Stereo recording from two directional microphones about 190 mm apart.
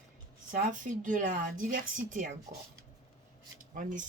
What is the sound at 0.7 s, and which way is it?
Speech, 45° right (ahead or behind).